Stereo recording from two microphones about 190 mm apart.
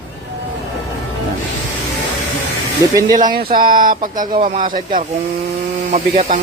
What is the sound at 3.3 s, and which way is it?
Speech, 50° right (ahead or behind).